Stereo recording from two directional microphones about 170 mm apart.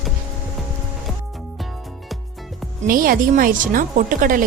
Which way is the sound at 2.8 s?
55° right (ahead or behind).